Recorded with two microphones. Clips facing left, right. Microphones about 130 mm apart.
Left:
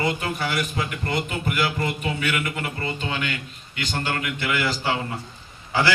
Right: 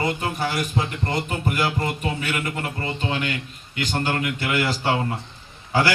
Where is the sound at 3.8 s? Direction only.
40° right (ahead or behind).